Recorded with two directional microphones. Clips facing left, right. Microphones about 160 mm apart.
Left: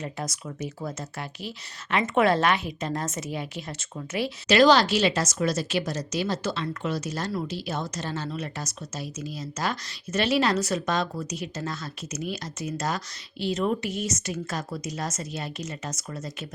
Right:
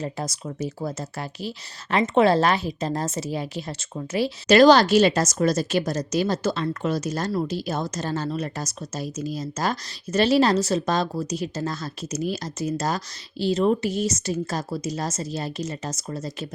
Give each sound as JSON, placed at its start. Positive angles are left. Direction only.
{"t": 0.0, "sound": "speech", "side_deg": -35}